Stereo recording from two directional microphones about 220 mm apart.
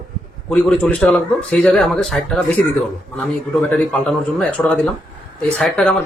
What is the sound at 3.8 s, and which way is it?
Speech, 5° left (ahead or behind).